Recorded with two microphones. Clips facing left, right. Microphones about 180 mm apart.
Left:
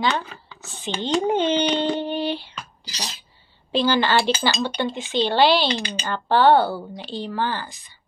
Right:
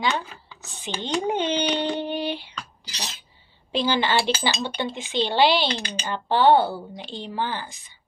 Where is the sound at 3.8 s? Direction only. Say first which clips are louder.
Left 3 dB; 20° right (ahead or behind).